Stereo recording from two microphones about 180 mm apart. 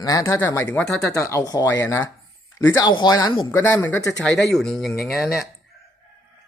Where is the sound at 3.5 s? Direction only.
15° left (ahead or behind).